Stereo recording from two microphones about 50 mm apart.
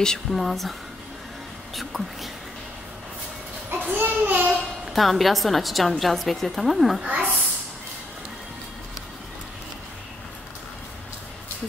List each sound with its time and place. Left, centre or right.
0.0 s speech: centre
0.4 s a woman's voice: centre
1.8 s a woman's voice: centre
3.9 s a sound: right
4.9 s a woman's voice: centre
7.0 s speech: right